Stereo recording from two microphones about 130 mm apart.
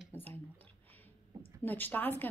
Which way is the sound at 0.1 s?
15° left (ahead or behind).